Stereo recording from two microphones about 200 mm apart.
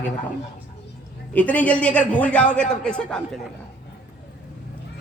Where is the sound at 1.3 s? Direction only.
5° left (ahead or behind).